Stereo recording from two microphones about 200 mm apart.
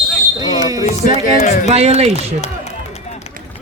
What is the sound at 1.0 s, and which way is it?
Speech, 40° left (ahead or behind).